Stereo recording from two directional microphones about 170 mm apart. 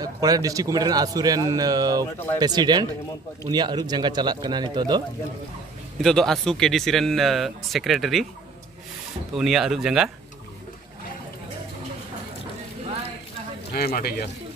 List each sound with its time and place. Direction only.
0.0 s speech: 20° right (ahead or behind)
6.0 s speech: centre (ahead or behind)
9.3 s speech: centre (ahead or behind)
13.7 s speech: 65° left (ahead or behind)